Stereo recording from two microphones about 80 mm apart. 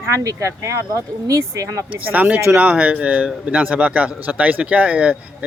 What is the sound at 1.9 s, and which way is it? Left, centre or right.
Speech, centre.